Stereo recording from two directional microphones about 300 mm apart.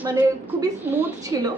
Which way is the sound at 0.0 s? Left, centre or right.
Centre.